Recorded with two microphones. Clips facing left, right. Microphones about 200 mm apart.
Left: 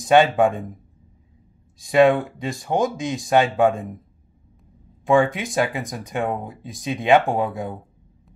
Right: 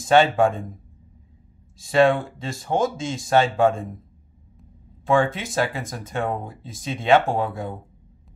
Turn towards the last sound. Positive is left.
turn(degrees=15)  # may be behind; listen again after turning